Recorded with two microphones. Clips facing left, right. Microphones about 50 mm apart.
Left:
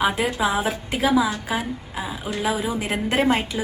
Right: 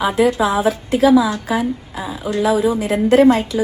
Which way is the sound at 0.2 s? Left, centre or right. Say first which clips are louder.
Right 7 dB; left.